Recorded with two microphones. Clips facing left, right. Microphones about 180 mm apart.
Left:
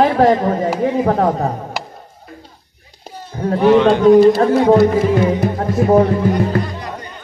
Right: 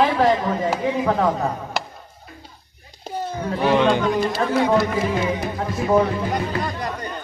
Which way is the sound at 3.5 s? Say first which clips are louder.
Left 7 dB; 45° left (ahead or behind).